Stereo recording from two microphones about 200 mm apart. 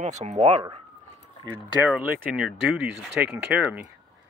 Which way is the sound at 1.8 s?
5° right (ahead or behind).